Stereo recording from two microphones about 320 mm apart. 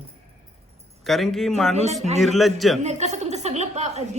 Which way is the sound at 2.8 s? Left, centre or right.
Right.